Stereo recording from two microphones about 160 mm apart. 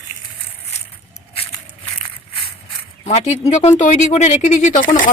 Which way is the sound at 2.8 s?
40° left (ahead or behind).